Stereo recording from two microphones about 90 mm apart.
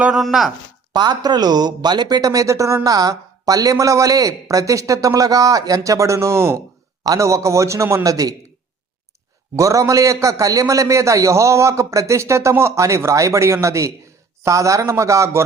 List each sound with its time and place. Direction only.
0.0 s chopping: 5° right (ahead or behind)
0.9 s speech: 55° right (ahead or behind)
9.6 s speech: 35° right (ahead or behind)